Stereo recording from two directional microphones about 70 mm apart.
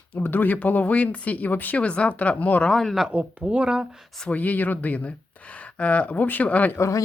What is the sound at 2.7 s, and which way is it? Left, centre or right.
Speech, centre.